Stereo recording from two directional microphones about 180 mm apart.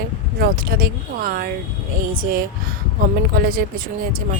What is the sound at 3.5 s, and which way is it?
Speech, 50° right (ahead or behind).